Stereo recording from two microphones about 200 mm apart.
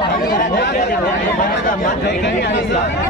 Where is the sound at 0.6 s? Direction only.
50° left (ahead or behind).